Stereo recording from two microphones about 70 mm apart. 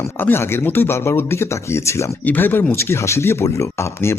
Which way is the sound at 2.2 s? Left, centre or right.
Left.